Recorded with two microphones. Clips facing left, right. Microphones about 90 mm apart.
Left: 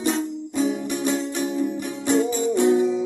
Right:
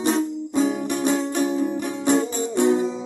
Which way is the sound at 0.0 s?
30° right (ahead or behind).